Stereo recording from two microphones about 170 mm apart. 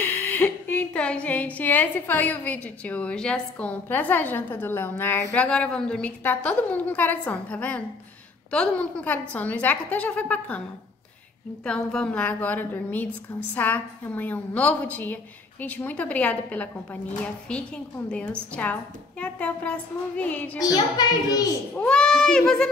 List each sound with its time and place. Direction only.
0.0 s a woman's voice: 10° left (ahead or behind)
11.6 s a woman's voice: 5° left (ahead or behind)
20.5 s a child's voice: 25° left (ahead or behind)
21.7 s a child's voice: 5° left (ahead or behind)